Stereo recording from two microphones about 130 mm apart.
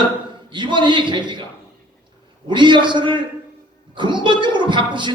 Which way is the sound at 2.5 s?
35° right (ahead or behind).